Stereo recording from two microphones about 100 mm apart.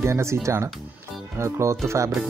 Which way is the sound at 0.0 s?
30° right (ahead or behind).